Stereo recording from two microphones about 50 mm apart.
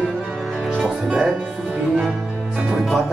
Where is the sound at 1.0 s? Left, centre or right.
Centre.